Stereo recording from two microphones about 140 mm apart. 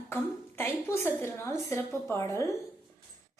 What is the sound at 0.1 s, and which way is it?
A woman's voice, 15° left (ahead or behind).